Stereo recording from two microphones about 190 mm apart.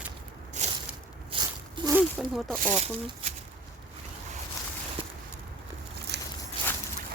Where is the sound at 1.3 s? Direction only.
25° right (ahead or behind).